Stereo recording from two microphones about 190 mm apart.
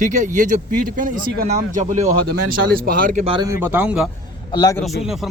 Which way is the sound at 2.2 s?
50° right (ahead or behind).